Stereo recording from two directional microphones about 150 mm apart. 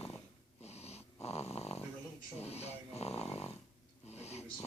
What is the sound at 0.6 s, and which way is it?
Dog, 45° left (ahead or behind).